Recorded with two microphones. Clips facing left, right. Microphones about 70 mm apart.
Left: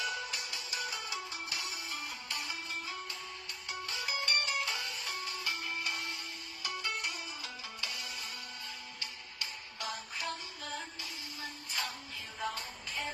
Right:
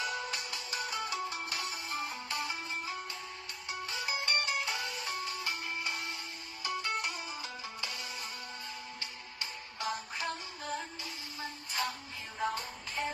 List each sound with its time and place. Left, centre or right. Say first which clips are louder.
0.0 s music: right 2 dB; right
6.9 s music: right 3 dB; right
7.4 s music: right 2 dB; right